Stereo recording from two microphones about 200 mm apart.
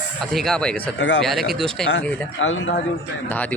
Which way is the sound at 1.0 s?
60° left (ahead or behind).